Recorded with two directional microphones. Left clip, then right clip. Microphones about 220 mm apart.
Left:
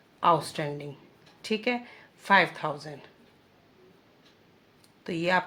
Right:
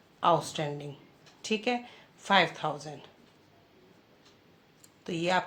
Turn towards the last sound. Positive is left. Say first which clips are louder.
# left 2 dB
turn(degrees=20)  # may be behind; listen again after turning